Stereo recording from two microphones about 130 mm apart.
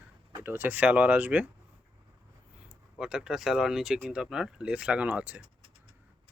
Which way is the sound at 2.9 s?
5° right (ahead or behind).